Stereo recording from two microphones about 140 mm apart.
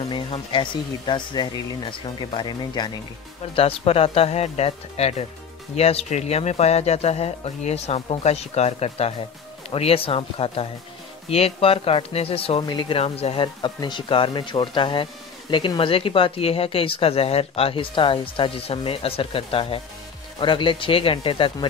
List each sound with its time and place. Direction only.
0.1 s speech: 35° left (ahead or behind)
3.5 s speech: 40° left (ahead or behind)